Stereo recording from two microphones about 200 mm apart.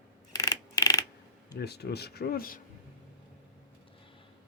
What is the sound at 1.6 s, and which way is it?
Speech, 55° left (ahead or behind).